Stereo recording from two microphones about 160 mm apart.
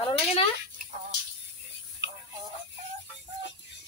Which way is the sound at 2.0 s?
90° right.